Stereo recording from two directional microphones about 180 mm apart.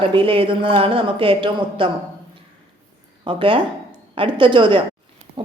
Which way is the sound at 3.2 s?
30° right (ahead or behind).